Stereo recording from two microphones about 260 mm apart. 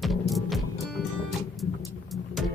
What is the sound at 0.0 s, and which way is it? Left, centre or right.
Music, centre.